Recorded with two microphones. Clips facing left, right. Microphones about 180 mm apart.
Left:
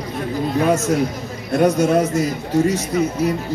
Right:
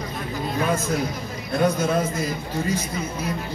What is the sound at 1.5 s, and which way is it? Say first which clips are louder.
Speech: left 6 dB; 75° left (ahead or behind).